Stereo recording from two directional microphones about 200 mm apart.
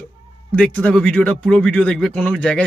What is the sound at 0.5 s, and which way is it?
Speech, 5° left (ahead or behind).